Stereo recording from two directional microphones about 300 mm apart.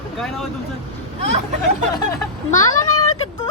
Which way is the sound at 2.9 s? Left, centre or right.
Left.